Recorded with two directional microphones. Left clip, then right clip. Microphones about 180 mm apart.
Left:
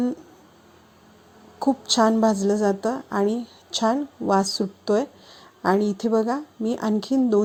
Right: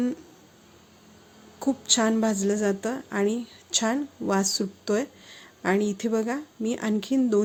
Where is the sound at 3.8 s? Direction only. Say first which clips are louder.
Left 8 dB; 10° right (ahead or behind).